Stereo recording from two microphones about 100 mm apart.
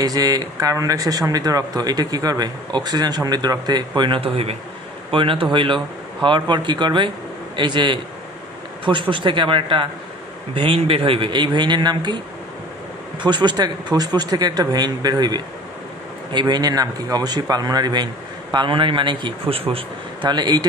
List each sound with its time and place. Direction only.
0.0 s speech: 40° right (ahead or behind); by 4.6 s 80° right
5.1 s a man's voice: 60° right (ahead or behind)
9.1 s a man's voice: 55° right (ahead or behind)
13.2 s speech: 50° right (ahead or behind)
18.5 s a man's voice: 55° right (ahead or behind); by 20.2 s 70° right (ahead or behind)
20.2 s speech: 45° right (ahead or behind)